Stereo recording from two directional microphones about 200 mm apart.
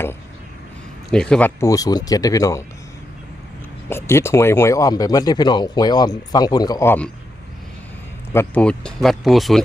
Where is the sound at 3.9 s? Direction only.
15° left (ahead or behind).